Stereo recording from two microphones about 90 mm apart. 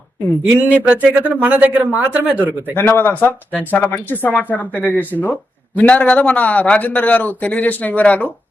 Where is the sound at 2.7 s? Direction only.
25° left (ahead or behind).